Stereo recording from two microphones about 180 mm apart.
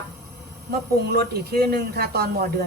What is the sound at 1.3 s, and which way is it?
A woman's voice, 60° right (ahead or behind).